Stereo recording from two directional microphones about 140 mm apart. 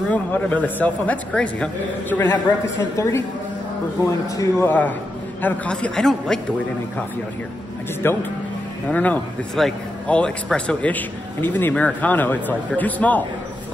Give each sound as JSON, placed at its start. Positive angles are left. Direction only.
{"t": 0.1, "sound": "a man's voice", "side_deg": 10}
{"t": 4.6, "sound": "a man's voice", "side_deg": 10}
{"t": 8.0, "sound": "a man's voice", "side_deg": 15}